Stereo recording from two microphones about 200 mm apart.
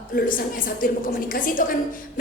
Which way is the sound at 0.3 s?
45° left (ahead or behind).